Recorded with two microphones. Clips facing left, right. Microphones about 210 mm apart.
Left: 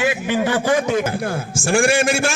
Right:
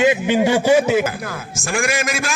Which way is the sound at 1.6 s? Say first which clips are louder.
Left 5 dB; 30° left (ahead or behind).